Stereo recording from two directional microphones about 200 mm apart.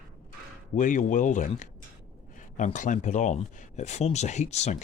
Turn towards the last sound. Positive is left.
turn(degrees=35)  # may be behind; listen again after turning